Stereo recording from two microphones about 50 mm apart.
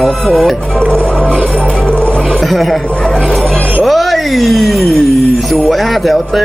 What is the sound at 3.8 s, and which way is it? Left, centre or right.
Speech, centre.